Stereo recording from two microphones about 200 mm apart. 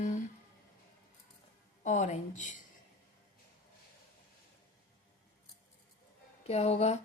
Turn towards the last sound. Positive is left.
turn(degrees=30)  # may be behind; listen again after turning